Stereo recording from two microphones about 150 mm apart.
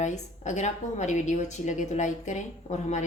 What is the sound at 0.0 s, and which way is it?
A woman's voice, 50° left (ahead or behind).